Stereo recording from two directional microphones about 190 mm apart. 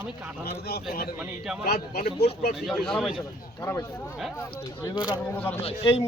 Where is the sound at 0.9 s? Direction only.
50° left (ahead or behind).